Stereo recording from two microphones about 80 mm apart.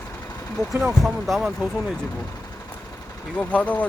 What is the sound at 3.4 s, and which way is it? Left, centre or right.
Speech, centre.